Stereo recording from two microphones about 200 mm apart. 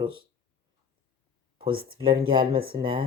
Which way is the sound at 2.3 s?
25° right (ahead or behind).